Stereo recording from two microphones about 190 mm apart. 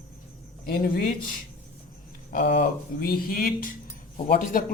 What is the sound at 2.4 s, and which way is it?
Speech, 45° left (ahead or behind).